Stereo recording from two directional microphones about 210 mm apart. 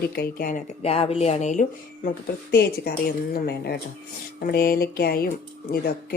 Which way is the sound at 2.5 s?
50° left (ahead or behind).